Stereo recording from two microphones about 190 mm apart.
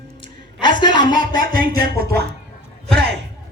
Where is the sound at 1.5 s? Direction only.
50° right (ahead or behind).